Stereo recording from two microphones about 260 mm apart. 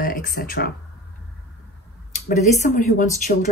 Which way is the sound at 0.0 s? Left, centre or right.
Left.